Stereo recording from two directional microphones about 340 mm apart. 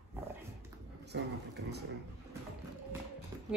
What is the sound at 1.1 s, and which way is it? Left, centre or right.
Speech, right.